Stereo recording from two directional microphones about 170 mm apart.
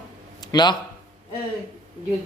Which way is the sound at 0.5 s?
25° left (ahead or behind).